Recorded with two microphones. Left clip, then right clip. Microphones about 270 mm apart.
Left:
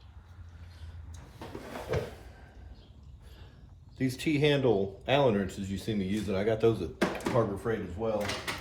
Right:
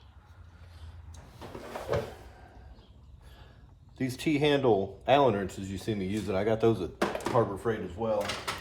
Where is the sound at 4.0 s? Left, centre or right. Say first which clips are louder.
Even; right.